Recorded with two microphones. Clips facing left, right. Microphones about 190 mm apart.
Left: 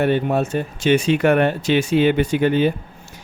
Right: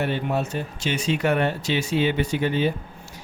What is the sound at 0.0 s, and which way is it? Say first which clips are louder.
Speech: left 6 dB; 55° left (ahead or behind).